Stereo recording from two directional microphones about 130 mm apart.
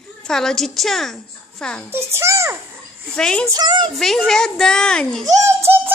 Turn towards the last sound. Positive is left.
turn(degrees=-20)  # may be behind; listen again after turning